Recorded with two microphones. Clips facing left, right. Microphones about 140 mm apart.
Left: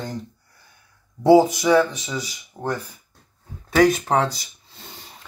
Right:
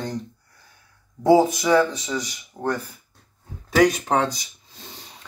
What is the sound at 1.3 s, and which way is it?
Speech, 10° left (ahead or behind).